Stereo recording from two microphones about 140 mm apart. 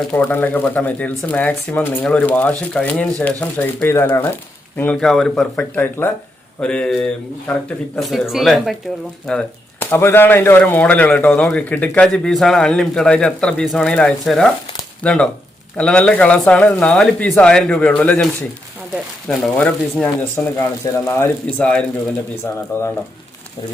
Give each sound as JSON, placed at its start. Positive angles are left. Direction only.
{"t": 0.1, "sound": "speech", "side_deg": 15}
{"t": 9.2, "sound": "a sound", "side_deg": 5}
{"t": 9.9, "sound": "speech", "side_deg": 15}
{"t": 19.3, "sound": "speech", "side_deg": 10}